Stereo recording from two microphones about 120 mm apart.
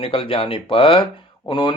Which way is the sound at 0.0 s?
50° left (ahead or behind).